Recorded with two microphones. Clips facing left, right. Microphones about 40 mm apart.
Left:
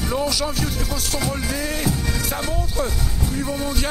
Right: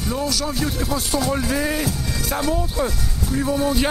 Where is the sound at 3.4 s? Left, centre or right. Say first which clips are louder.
Right 6 dB; centre.